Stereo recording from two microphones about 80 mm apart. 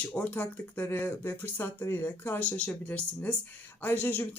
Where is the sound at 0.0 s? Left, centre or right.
Centre.